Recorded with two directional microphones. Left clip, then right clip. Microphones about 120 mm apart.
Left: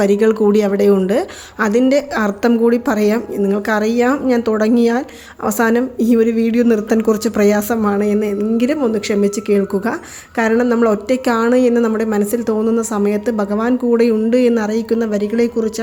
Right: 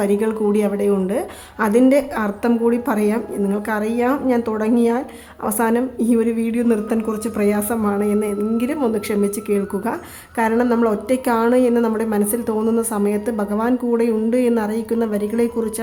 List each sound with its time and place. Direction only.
0.0 s a woman's voice: 30° left (ahead or behind)